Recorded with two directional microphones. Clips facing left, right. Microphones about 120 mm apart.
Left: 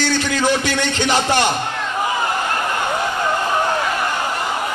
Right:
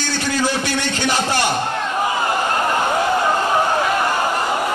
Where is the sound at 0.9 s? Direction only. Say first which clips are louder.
Left 3 dB; 20° left (ahead or behind).